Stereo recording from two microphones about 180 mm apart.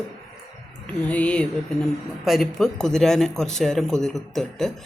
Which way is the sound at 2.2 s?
Centre (ahead or behind).